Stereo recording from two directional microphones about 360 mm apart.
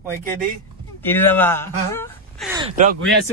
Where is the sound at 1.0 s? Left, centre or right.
Centre.